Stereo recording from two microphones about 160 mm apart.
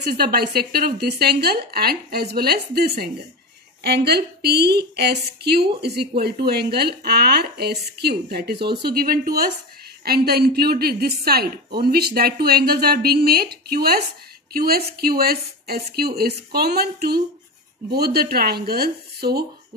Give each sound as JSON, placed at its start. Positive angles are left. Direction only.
{"t": 0.0, "sound": "speech", "side_deg": -80}
{"t": 3.8, "sound": "a woman's voice", "side_deg": -90}
{"t": 10.0, "sound": "a woman's voice", "side_deg": -80}